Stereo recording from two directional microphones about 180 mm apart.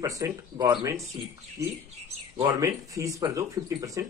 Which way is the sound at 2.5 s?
20° right (ahead or behind).